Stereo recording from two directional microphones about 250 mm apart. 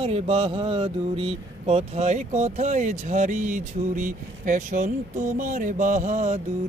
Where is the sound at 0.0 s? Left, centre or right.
Right.